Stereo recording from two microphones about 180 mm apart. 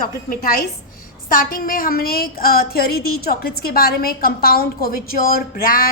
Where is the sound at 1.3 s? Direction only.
50° left (ahead or behind).